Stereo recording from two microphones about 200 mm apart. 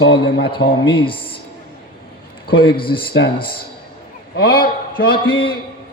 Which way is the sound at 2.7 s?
25° left (ahead or behind).